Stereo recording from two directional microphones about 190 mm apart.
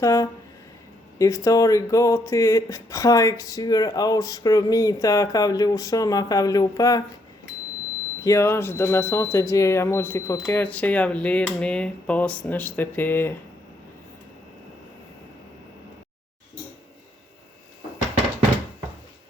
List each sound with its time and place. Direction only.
0.0 s speech: 15° left (ahead or behind)
8.2 s speech: 15° left (ahead or behind)